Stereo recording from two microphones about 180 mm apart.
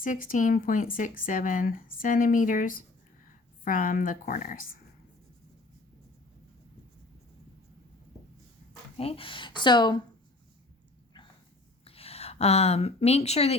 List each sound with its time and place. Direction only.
0.0 s speech: 50° left (ahead or behind)
9.0 s speech: 30° left (ahead or behind)
11.9 s a woman's voice: 35° left (ahead or behind)